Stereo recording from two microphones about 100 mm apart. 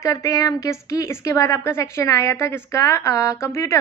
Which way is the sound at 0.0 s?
35° left (ahead or behind).